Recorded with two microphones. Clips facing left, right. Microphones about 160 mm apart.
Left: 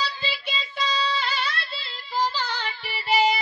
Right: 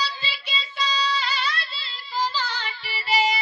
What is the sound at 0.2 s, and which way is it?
Child singing, 55° left (ahead or behind).